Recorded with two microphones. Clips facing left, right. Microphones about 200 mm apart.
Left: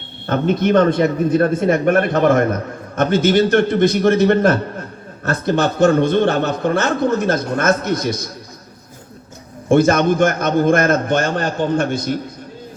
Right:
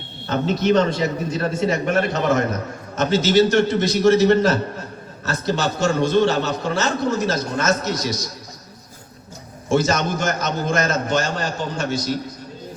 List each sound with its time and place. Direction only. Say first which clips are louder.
0.3 s a man's voice: left 3 dB; 55° left (ahead or behind)
9.6 s a man's voice: left 7 dB; 55° left (ahead or behind)